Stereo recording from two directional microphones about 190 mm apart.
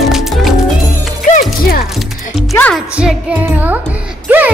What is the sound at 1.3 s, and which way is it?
Music, 45° left (ahead or behind).